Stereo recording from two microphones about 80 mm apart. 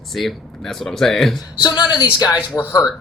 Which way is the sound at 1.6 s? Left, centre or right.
Left.